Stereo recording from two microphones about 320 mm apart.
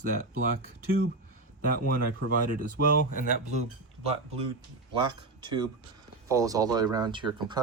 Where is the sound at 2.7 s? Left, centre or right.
Left.